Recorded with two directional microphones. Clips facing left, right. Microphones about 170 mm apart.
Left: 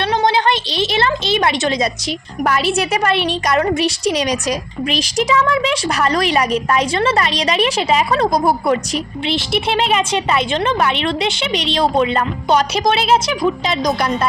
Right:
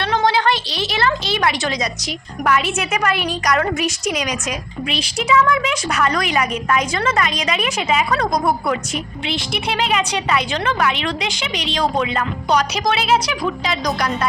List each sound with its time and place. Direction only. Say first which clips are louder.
0.0 s a woman's voice: left 2 dB; 20° left (ahead or behind)